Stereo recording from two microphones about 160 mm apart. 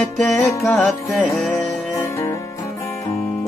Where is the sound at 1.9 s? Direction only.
15° left (ahead or behind).